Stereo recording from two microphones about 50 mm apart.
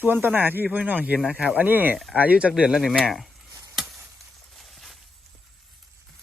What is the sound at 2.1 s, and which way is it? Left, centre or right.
Speech, right.